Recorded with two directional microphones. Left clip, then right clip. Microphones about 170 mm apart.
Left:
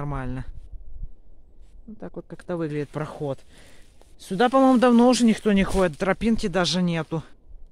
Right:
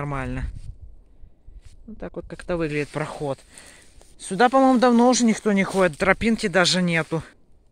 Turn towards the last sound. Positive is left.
turn(degrees=-5)  # may be behind; listen again after turning